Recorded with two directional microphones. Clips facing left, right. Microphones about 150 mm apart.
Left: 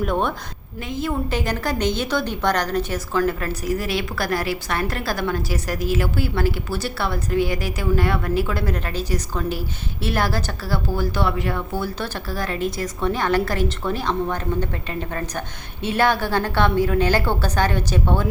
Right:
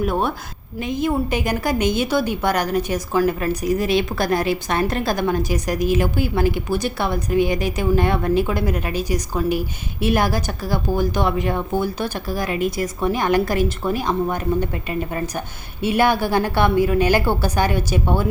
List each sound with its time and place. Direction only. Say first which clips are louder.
0.0 s a woman's voice: right 1 dB; 5° right (ahead or behind)
15.8 s a woman's voice: right 2 dB; 10° right (ahead or behind)